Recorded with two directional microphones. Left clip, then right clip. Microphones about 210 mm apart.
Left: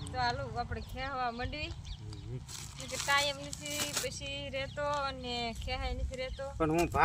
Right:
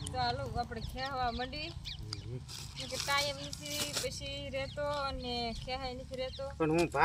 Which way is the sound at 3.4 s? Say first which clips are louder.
Left 1 dB; 5° left (ahead or behind).